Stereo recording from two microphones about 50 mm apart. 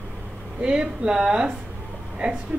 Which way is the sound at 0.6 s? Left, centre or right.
Centre.